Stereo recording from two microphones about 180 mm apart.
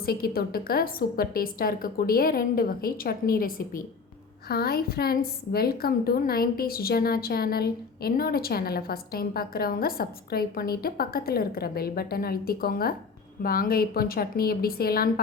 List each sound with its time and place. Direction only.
0.0 s a woman's voice: 60° left (ahead or behind)